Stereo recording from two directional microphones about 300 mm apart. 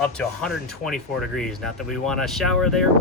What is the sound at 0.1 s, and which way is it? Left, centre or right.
Speech, centre.